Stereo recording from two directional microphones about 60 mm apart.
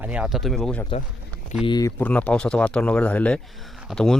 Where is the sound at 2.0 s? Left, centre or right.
Left.